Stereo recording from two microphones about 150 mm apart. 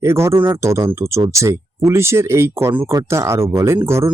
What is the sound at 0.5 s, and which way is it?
Speech, 20° right (ahead or behind).